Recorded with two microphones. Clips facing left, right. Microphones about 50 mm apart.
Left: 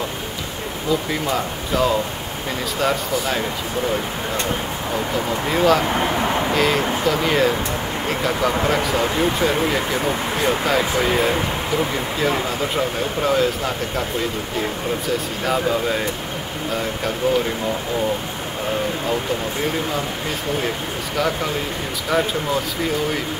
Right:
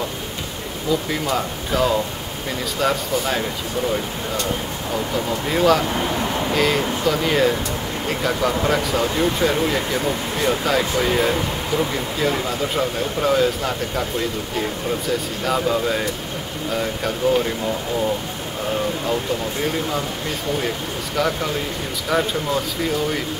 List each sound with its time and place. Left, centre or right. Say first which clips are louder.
1.3 s speech: right 1 dB; centre
5.5 s speech: even; centre
5.9 s speech: left 2 dB; left
6.5 s speech: left 1 dB; centre
15.4 s speech: even; centre
17.2 s speech: right 1 dB; centre
22.1 s speech: left 1 dB; centre